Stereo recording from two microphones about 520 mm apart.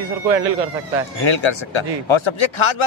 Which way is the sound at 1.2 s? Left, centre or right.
Left.